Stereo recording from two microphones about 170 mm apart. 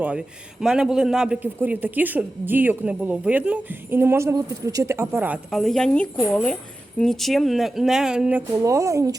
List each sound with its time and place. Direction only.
0.0 s a man's voice: 5° right (ahead or behind)
5.5 s speech: centre (ahead or behind)
8.6 s a man's voice: 20° right (ahead or behind)